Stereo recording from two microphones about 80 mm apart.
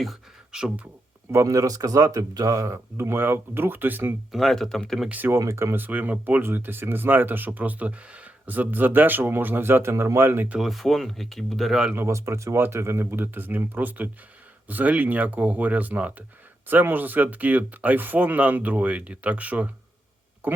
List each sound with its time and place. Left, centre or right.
0.0 s beatboxing: centre
1.3 s speech: right
4.3 s speech: centre
5.0 s speech: centre
5.4 s speech: right
5.7 s speech: right
10.6 s speech: centre
11.9 s speech: right; by 19.7 s centre
20.4 s a sound: right